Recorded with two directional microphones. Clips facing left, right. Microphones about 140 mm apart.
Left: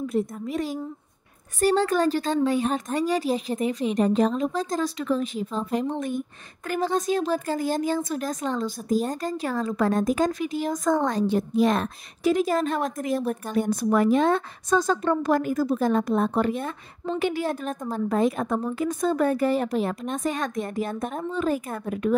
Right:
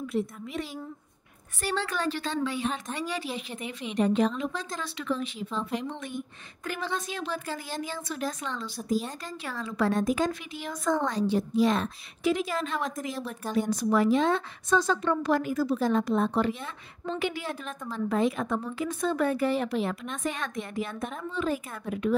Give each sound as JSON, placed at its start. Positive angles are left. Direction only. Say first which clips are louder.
{"t": 0.0, "sound": "speech", "louder": "left 4 dB", "side_deg": 40}